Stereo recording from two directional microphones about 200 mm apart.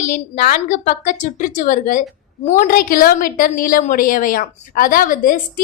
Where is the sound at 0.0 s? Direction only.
40° left (ahead or behind).